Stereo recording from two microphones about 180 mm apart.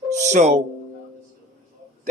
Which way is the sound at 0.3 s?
40° right (ahead or behind).